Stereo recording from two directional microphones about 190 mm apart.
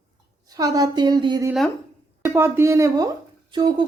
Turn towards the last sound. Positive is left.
turn(degrees=-25)  # may be behind; listen again after turning